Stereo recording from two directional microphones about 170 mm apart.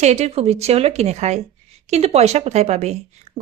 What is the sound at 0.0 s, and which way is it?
Speech, 40° right (ahead or behind).